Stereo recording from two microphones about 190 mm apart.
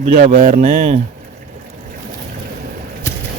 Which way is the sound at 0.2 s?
50° right (ahead or behind).